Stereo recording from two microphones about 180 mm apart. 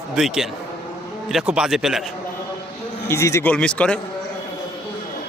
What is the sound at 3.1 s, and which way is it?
Speech, 15° left (ahead or behind).